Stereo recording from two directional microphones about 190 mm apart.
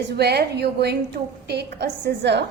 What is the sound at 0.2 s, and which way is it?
A woman's voice, 60° right (ahead or behind).